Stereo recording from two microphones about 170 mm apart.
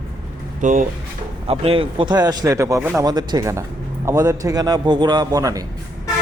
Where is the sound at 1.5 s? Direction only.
30° right (ahead or behind).